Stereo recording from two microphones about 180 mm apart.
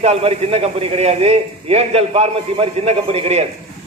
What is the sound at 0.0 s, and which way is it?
A man's voice, 35° right (ahead or behind).